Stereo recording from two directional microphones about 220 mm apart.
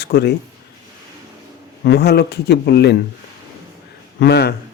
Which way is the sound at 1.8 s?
50° left (ahead or behind).